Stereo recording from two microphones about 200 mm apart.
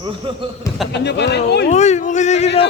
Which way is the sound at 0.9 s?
60° left (ahead or behind).